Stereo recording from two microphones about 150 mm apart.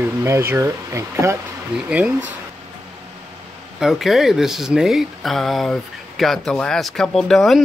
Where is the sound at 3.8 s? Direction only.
Centre (ahead or behind).